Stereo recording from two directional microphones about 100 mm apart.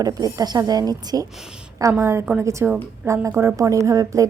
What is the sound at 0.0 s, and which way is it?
A woman's voice, 40° right (ahead or behind).